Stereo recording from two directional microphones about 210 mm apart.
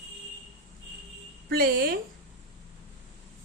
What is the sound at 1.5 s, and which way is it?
Speech, 45° right (ahead or behind).